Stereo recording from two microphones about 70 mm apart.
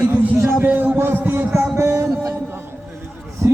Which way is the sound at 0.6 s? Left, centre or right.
Right.